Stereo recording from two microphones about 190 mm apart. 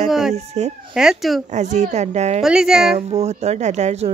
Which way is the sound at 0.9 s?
Centre (ahead or behind).